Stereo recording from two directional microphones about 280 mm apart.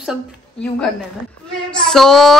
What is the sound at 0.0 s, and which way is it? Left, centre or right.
Speech, centre.